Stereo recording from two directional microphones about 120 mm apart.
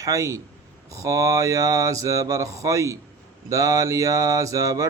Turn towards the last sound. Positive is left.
turn(degrees=-30)  # may be behind; listen again after turning